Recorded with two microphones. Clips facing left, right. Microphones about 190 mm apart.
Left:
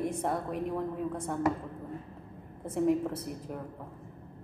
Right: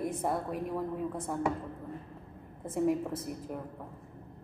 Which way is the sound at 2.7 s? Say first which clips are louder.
Left 2 dB; centre (ahead or behind).